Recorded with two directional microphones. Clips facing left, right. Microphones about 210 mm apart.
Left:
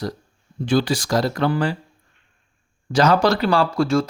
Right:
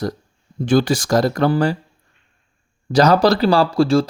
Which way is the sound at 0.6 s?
50° right (ahead or behind).